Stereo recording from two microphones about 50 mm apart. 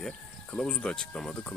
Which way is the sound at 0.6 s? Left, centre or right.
Left.